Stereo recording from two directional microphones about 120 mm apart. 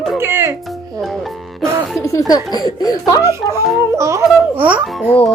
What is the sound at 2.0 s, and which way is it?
Speech, 30° left (ahead or behind).